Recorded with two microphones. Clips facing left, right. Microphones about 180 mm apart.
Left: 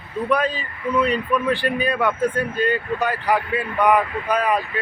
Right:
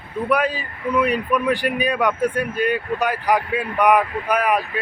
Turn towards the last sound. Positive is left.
turn(degrees=-10)  # may be behind; listen again after turning